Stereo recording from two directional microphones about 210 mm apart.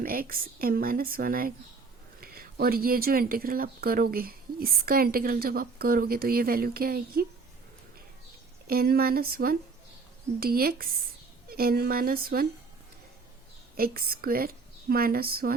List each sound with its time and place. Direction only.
0.0 s speech: 45° right (ahead or behind)
8.6 s speech: 45° right (ahead or behind)
13.7 s speech: 45° right (ahead or behind)